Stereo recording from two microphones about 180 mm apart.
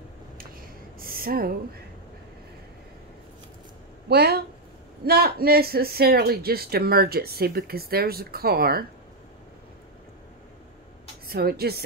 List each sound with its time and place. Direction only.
0.4 s a sound: 55° right (ahead or behind)
4.1 s speech: 65° right (ahead or behind)
11.2 s speech: 60° right (ahead or behind)